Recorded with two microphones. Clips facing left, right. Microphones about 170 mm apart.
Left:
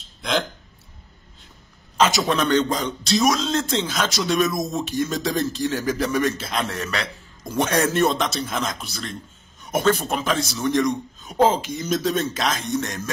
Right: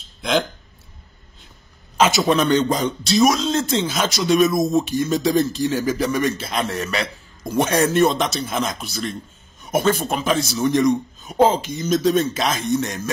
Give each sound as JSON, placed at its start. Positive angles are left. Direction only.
{"t": 0.2, "sound": "speech", "side_deg": 0}
{"t": 2.0, "sound": "speech", "side_deg": -5}